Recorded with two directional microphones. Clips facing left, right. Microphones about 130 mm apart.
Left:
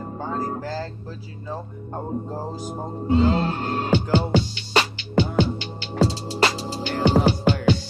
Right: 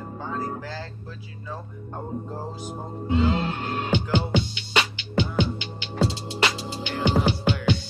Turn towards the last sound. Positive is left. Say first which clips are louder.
# left 4 dB
turn(degrees=40)  # may be behind; listen again after turning